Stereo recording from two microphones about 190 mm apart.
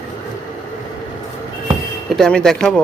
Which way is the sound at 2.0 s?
Centre (ahead or behind).